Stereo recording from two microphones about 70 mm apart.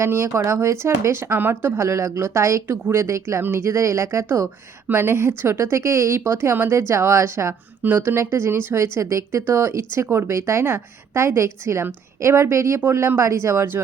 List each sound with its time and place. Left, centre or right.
0.0 s speech: right
7.8 s speech: right